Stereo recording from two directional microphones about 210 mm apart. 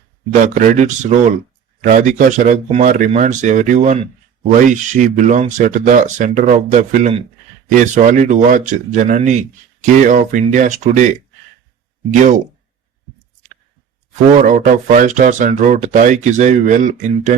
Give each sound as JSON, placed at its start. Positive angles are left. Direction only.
{"t": 0.4, "sound": "speech", "side_deg": -35}
{"t": 14.3, "sound": "speech", "side_deg": -40}